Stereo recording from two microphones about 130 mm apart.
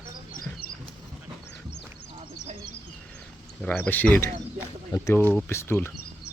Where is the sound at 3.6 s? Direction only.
15° left (ahead or behind).